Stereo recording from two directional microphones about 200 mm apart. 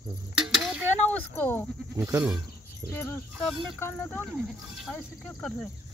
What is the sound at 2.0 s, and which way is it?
Speech, 10° right (ahead or behind).